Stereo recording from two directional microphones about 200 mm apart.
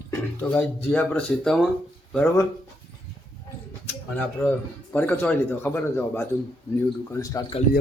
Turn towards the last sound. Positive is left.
turn(degrees=15)  # may be behind; listen again after turning